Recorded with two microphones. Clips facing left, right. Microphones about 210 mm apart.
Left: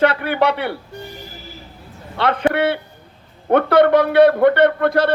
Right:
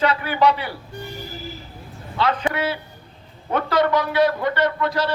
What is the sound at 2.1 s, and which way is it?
A man's voice, 60° left (ahead or behind).